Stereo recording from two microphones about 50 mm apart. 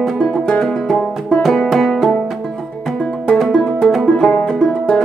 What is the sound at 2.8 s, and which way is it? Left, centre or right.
Music, centre.